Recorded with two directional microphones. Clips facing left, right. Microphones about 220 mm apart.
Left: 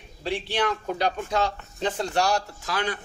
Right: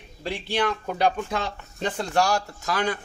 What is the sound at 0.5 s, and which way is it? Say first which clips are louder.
A man's voice: right 3 dB; 50° right (ahead or behind).